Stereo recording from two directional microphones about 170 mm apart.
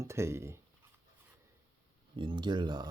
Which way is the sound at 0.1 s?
15° right (ahead or behind).